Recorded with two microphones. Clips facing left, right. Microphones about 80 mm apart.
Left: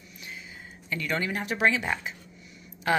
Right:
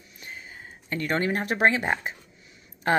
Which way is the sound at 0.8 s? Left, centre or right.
Right.